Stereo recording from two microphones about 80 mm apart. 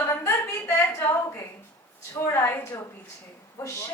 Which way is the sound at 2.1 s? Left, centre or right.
Left.